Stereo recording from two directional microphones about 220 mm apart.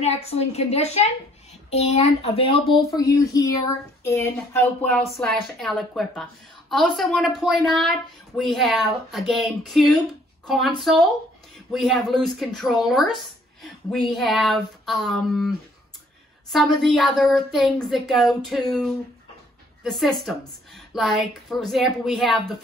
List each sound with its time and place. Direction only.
0.0 s a woman's voice: 30° left (ahead or behind)
3.0 s speech: 15° left (ahead or behind); by 22.3 s centre (ahead or behind)